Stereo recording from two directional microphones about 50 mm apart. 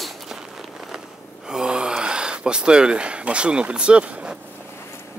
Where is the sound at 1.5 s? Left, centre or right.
Centre.